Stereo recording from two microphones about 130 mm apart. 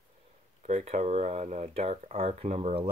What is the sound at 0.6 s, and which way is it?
Speech, 70° right (ahead or behind).